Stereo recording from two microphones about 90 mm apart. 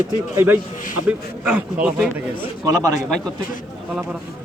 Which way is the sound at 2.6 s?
40° right (ahead or behind).